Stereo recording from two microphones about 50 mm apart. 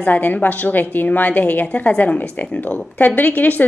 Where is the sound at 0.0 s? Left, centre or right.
Left.